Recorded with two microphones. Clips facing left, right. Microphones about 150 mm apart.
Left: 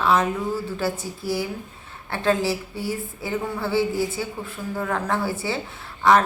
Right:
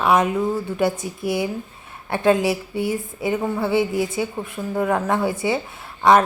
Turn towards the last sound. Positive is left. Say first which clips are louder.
# right 3 dB
turn(degrees=-20)  # may be behind; listen again after turning